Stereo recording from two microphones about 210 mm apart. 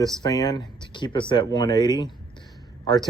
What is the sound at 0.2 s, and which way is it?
Speech, 20° left (ahead or behind).